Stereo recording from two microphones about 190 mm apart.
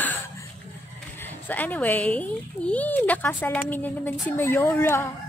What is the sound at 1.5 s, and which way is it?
Speech, 10° left (ahead or behind).